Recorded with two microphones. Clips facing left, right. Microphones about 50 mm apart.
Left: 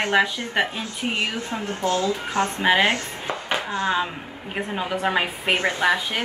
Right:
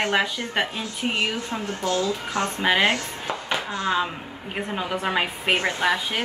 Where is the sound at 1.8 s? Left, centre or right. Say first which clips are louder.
Left 2 dB; left.